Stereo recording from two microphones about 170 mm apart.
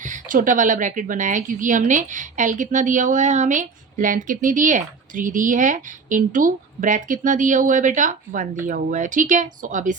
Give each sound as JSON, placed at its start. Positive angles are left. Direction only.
{"t": 0.0, "sound": "a woman's voice", "side_deg": -50}